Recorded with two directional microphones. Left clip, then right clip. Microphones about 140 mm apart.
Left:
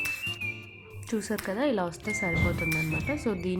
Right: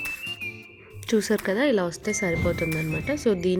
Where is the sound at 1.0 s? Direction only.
30° right (ahead or behind).